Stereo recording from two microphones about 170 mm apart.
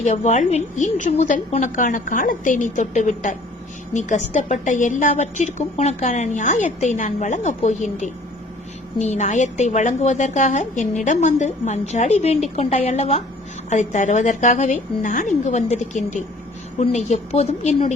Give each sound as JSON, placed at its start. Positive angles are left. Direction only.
{"t": 0.0, "sound": "a woman's voice", "side_deg": 40}